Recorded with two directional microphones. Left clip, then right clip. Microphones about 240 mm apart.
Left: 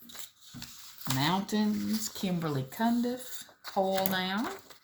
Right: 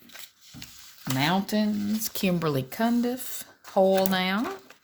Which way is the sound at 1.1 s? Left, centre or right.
Right.